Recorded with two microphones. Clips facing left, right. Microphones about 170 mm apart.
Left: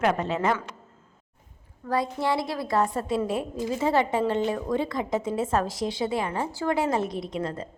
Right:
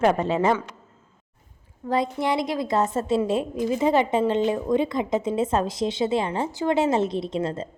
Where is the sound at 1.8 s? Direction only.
20° right (ahead or behind).